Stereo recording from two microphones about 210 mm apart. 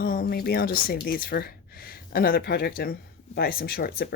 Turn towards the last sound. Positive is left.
turn(degrees=45)  # may be behind; listen again after turning